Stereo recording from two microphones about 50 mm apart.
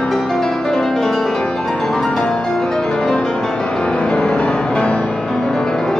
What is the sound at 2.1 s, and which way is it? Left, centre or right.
Music, left.